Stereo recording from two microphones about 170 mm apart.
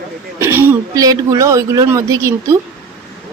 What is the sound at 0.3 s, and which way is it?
A woman's voice, 15° right (ahead or behind).